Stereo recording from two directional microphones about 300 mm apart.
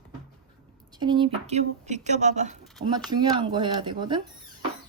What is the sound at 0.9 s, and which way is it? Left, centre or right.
Speech, centre.